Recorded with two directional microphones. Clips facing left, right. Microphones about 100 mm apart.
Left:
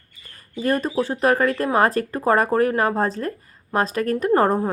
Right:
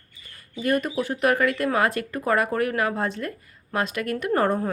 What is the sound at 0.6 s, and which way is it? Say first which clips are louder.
Speech: left 2 dB; 30° left (ahead or behind).